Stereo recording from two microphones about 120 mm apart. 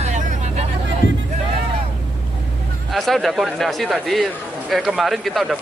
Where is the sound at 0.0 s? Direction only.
65° right (ahead or behind).